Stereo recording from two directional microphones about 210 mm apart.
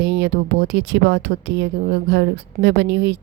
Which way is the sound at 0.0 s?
55° right (ahead or behind).